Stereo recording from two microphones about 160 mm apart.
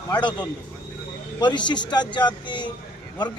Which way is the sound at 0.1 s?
30° left (ahead or behind).